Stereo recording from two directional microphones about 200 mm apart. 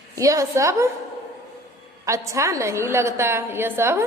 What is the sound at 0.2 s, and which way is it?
Speech, 15° right (ahead or behind).